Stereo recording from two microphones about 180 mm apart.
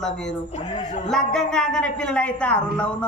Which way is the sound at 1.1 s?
5° left (ahead or behind).